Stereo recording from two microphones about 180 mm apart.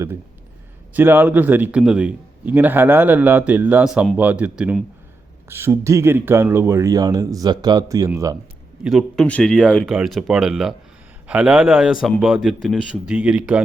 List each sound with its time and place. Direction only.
0.9 s a man's voice: 10° right (ahead or behind)
8.8 s a man's voice: centre (ahead or behind)